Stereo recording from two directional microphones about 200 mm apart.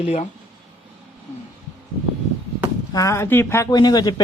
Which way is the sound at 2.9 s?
15° left (ahead or behind).